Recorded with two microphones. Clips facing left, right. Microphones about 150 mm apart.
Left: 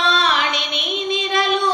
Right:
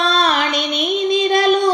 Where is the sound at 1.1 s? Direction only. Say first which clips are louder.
Right 5 dB; 40° right (ahead or behind).